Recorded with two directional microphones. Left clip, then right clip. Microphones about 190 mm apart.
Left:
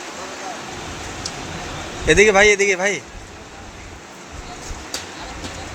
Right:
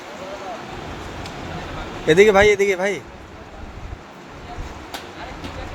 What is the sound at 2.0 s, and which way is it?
Speech, 15° right (ahead or behind).